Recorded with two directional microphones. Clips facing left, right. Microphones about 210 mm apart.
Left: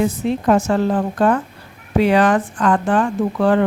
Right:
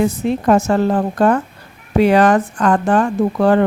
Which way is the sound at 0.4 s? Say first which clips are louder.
Right 2 dB; 45° right (ahead or behind).